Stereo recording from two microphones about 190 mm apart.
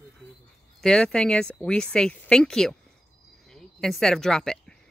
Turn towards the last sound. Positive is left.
turn(degrees=5)  # may be behind; listen again after turning